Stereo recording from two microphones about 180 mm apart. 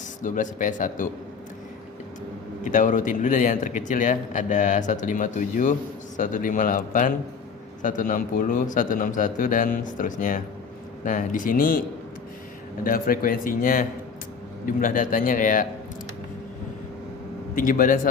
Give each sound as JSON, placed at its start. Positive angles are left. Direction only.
{"t": 0.2, "sound": "a man's voice", "side_deg": 45}
{"t": 2.6, "sound": "a man's voice", "side_deg": 45}
{"t": 17.5, "sound": "a man's voice", "side_deg": 50}